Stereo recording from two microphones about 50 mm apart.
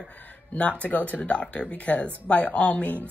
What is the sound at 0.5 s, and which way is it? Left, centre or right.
A woman's voice, left.